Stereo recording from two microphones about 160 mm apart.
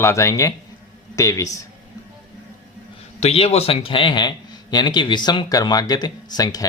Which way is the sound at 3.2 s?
40° left (ahead or behind).